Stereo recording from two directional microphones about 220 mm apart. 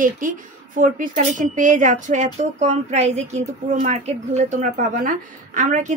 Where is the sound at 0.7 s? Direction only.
35° right (ahead or behind).